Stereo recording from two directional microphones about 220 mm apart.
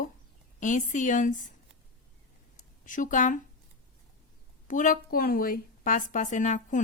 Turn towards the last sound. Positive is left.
turn(degrees=35)  # may be behind; listen again after turning